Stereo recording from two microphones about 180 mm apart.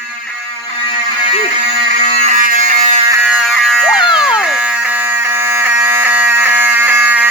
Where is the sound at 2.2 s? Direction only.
45° right (ahead or behind).